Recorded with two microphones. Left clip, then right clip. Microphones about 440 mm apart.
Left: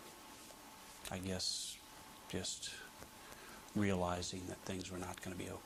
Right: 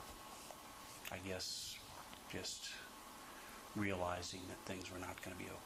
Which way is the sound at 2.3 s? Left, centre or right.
Left.